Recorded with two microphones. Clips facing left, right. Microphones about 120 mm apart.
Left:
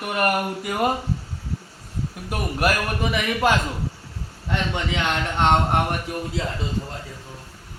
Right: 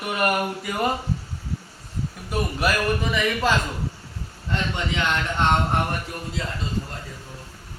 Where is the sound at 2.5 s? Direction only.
55° left (ahead or behind).